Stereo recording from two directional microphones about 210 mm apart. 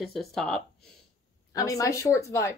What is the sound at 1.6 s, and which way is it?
Speech, 15° left (ahead or behind).